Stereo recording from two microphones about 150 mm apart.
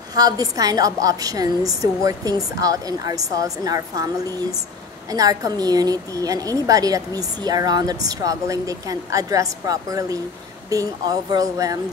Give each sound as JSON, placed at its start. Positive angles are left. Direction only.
{"t": 0.1, "sound": "a woman's voice", "side_deg": -25}